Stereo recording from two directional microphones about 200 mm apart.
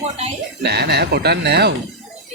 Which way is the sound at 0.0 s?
30° right (ahead or behind).